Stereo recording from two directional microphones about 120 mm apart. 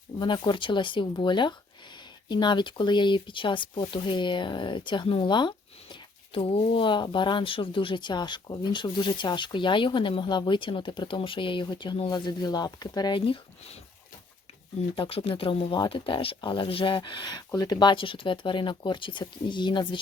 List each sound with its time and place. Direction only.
0.2 s speech: 40° left (ahead or behind)
14.9 s speech: 45° left (ahead or behind)